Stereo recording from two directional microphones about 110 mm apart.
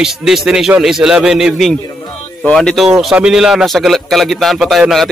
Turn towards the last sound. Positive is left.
turn(degrees=0)  # may be behind; listen again after turning